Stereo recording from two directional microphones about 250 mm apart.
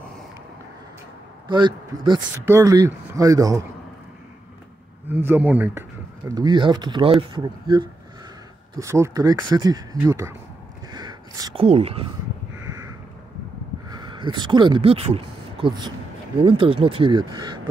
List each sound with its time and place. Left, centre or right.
1.5 s speech: centre
5.0 s speech: centre
12.5 s crow: centre
13.8 s speech: centre